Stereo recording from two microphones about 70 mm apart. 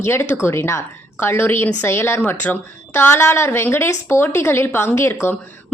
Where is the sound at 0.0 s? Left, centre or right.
Left.